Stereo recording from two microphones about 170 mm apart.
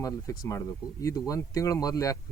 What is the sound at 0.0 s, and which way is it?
Speech, 20° left (ahead or behind).